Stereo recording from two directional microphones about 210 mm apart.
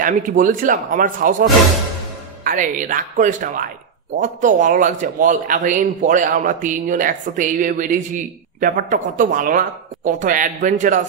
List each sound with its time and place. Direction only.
0.0 s speech: 40° right (ahead or behind)